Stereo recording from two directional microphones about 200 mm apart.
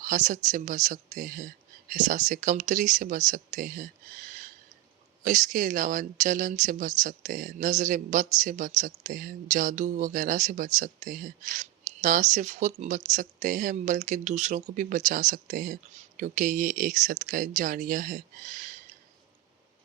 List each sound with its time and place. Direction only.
0.0 s speech: 40° right (ahead or behind)